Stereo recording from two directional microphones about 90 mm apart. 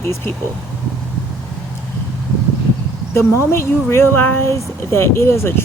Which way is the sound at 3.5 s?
30° left (ahead or behind).